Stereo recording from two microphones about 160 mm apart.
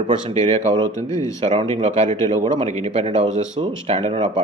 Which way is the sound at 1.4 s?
40° right (ahead or behind).